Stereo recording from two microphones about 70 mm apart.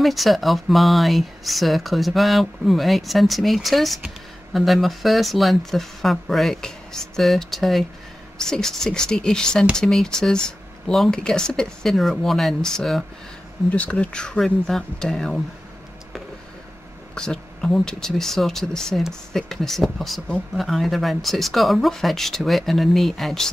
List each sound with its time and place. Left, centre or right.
0.0 s speech: centre
13.7 s speech: centre
17.1 s speech: centre